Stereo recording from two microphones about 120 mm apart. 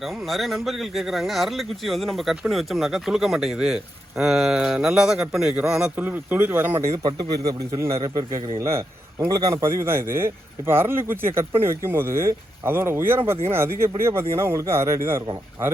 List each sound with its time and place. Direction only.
0.3 s speech: centre (ahead or behind); by 7.0 s 20° right (ahead or behind)
7.0 s a man's voice: 30° right (ahead or behind)